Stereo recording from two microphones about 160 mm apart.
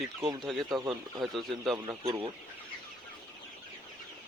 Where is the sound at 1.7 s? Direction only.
20° right (ahead or behind).